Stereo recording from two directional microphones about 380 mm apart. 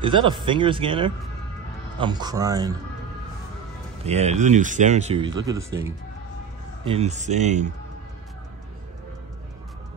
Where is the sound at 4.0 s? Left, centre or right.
Centre.